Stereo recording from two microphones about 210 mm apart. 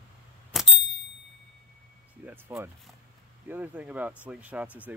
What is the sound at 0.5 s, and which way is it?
Vehicle, centre (ahead or behind).